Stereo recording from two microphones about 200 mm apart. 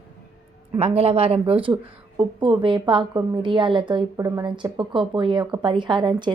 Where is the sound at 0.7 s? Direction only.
30° right (ahead or behind).